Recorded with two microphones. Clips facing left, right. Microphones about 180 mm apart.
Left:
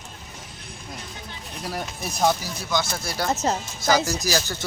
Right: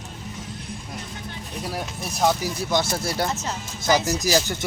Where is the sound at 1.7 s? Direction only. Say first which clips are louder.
Left 2 dB; centre (ahead or behind).